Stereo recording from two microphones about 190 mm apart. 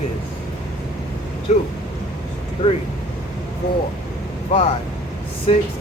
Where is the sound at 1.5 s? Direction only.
35° left (ahead or behind).